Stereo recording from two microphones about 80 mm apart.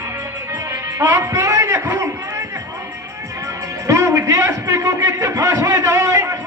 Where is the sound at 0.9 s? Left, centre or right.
Right.